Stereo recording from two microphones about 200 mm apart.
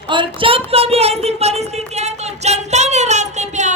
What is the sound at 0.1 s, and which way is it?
A woman's voice, 25° right (ahead or behind).